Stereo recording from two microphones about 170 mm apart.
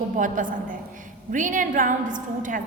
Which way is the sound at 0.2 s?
50° right (ahead or behind).